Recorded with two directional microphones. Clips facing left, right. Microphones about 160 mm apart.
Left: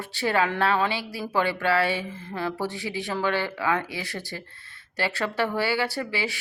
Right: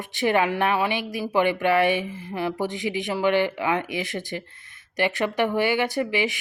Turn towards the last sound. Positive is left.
turn(degrees=-20)  # may be behind; listen again after turning